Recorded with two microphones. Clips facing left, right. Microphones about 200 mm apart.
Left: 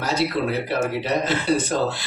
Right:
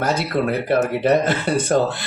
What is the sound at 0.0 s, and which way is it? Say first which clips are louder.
Speech: right 2 dB; 55° right (ahead or behind).